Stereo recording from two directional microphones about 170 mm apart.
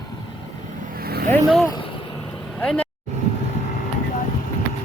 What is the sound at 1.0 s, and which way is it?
Vehicle, 65° right (ahead or behind).